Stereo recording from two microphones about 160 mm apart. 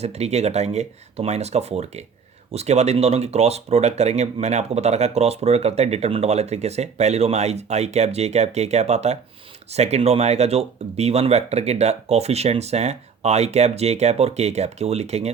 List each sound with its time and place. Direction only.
0.0 s speech: 40° right (ahead or behind)